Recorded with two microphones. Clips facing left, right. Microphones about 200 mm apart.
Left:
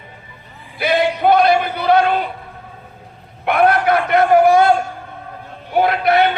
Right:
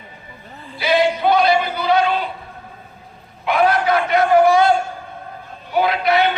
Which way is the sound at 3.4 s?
60° left (ahead or behind).